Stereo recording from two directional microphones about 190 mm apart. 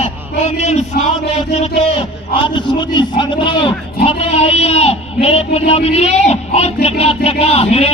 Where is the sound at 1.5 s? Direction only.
30° left (ahead or behind).